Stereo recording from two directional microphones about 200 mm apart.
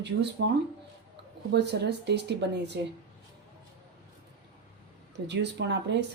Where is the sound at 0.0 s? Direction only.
60° right (ahead or behind).